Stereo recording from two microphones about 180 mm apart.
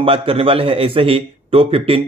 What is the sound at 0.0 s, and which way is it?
A man's voice, 30° right (ahead or behind).